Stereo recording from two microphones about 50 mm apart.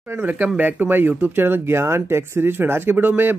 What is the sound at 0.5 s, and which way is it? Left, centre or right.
Speech, right.